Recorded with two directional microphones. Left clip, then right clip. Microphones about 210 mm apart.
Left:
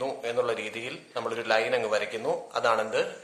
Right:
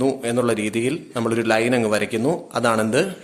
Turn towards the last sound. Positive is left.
turn(degrees=-40)  # may be behind; listen again after turning